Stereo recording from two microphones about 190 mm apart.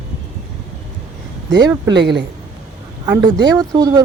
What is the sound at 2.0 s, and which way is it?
Speech, 65° right (ahead or behind).